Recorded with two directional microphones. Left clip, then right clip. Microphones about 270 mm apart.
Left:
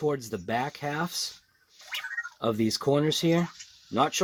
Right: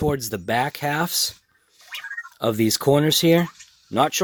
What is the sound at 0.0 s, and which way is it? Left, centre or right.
Speech, right.